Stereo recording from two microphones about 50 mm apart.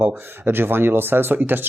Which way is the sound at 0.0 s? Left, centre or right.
Right.